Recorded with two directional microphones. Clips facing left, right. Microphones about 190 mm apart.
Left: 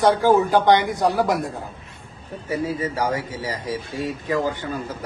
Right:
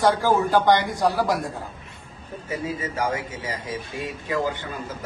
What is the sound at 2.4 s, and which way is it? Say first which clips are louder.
A man's voice: left 5 dB; 35° left (ahead or behind).